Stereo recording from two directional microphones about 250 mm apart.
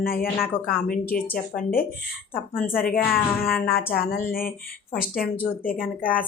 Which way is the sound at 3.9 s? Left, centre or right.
Left.